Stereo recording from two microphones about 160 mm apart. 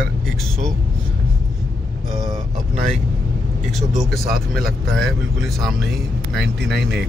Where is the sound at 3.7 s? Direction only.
Centre (ahead or behind).